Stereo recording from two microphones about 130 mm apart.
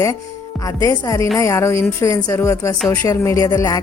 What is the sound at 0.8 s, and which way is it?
Speech, 25° left (ahead or behind).